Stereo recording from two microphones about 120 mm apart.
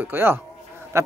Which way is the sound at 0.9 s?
25° right (ahead or behind).